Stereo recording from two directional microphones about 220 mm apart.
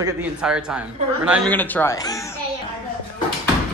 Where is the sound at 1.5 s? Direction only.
10° left (ahead or behind).